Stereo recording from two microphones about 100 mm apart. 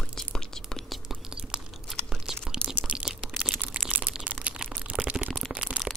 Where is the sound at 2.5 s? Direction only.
5° right (ahead or behind).